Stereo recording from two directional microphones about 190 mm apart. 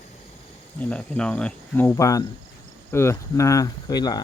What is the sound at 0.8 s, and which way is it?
Speech, 5° left (ahead or behind).